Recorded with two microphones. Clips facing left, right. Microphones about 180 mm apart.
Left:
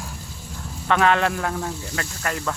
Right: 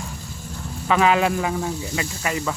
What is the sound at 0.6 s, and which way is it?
Speech, 5° right (ahead or behind).